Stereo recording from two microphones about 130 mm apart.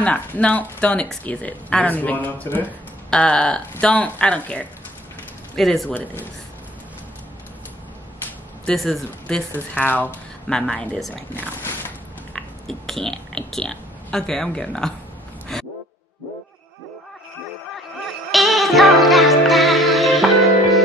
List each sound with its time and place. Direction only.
0.0 s speech: 10° left (ahead or behind)
8.6 s speech: 5° left (ahead or behind)
9.5 s speech: 15° left (ahead or behind)
11.3 s speech: 15° left (ahead or behind)
12.4 s speech: centre (ahead or behind)
15.5 s a sound: 5° left (ahead or behind)
18.3 s music: centre (ahead or behind)